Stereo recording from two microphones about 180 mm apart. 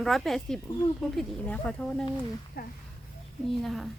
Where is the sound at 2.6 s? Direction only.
55° left (ahead or behind).